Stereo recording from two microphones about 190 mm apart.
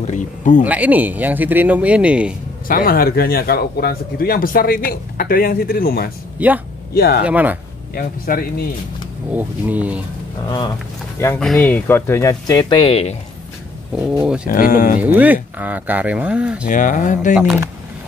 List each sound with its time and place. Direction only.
0.0 s a sound: 40° left (ahead or behind)
0.7 s speech: 10° right (ahead or behind)
2.7 s speech: 50° left (ahead or behind)
6.4 s speech: 10° right (ahead or behind)
6.9 s speech: 55° left (ahead or behind)
7.2 s speech: 10° right (ahead or behind)
7.9 s speech: 50° left (ahead or behind)
9.3 s speech: 10° right (ahead or behind)
11.3 s speech: centre (ahead or behind); by 13.1 s 30° left (ahead or behind)
14.1 s speech: 5° right (ahead or behind)
14.5 s speech: 45° left (ahead or behind)
15.0 s speech: 10° right (ahead or behind)
16.6 s speech: 45° left (ahead or behind)
17.3 s speech: 5° right (ahead or behind)